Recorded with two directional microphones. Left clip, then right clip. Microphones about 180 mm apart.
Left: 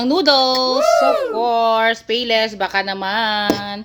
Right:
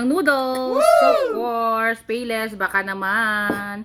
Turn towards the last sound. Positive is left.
turn(degrees=-15)  # may be behind; listen again after turning